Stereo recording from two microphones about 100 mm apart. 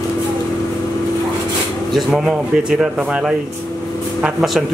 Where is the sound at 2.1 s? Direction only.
5° right (ahead or behind).